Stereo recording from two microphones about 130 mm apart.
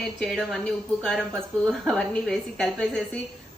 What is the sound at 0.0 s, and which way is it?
Speech, 5° left (ahead or behind).